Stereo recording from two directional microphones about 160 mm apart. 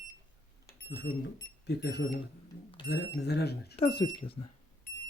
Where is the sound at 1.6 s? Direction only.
90° left.